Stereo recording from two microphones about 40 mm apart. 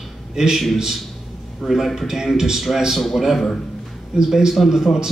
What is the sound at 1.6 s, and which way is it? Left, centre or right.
Speech, centre.